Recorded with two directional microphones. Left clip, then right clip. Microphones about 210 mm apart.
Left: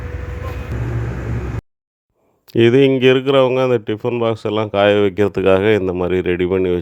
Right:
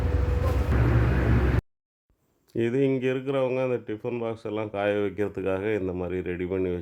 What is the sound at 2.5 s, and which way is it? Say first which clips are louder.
Speech: left 13 dB; 40° left (ahead or behind).